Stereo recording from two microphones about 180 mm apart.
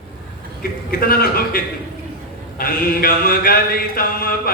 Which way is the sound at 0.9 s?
55° left (ahead or behind).